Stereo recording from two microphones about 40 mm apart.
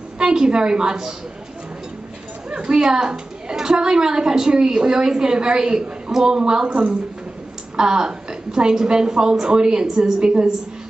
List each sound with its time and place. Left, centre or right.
0.2 s a woman's voice: centre
2.5 s a woman's voice: right